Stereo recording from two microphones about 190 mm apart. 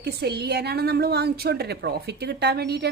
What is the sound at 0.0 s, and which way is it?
A woman's voice, 60° right (ahead or behind).